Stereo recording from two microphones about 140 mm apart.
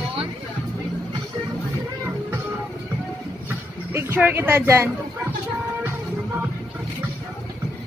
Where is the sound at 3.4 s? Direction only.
15° right (ahead or behind).